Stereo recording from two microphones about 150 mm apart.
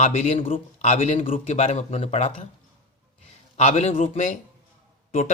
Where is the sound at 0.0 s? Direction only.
50° left (ahead or behind).